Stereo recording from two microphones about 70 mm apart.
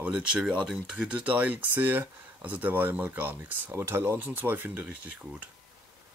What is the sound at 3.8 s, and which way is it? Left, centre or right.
Speech, right.